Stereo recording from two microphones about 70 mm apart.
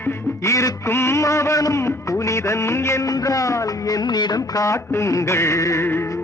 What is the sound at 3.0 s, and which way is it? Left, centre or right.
Music, left.